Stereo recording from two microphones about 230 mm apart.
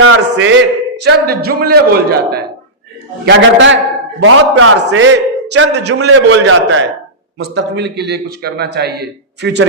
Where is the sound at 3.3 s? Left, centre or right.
Right.